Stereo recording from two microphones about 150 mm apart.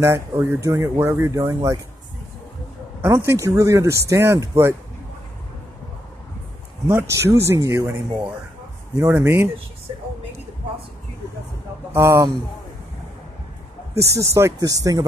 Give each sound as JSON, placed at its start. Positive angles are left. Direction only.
{"t": 0.0, "sound": "speech", "side_deg": -15}
{"t": 3.3, "sound": "speech", "side_deg": -20}
{"t": 6.9, "sound": "speech", "side_deg": -15}
{"t": 11.9, "sound": "speech", "side_deg": -15}
{"t": 14.1, "sound": "speech", "side_deg": -20}